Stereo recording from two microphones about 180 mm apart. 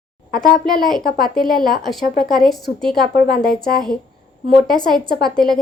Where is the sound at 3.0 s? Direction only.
60° left (ahead or behind).